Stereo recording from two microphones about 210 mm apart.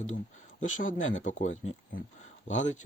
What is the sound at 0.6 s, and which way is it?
Speech, 35° left (ahead or behind).